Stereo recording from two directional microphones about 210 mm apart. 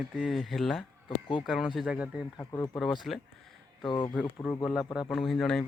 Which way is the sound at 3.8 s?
20° left (ahead or behind).